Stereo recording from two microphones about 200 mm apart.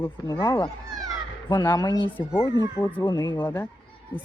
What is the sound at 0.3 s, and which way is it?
Speech, 25° left (ahead or behind).